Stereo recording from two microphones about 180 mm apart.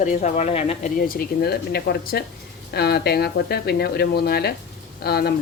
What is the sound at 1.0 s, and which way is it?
Speech, 55° left (ahead or behind).